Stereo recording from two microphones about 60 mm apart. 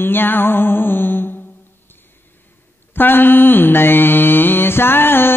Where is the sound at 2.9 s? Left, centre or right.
Left.